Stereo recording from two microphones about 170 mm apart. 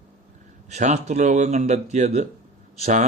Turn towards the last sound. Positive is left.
turn(degrees=-40)  # may be behind; listen again after turning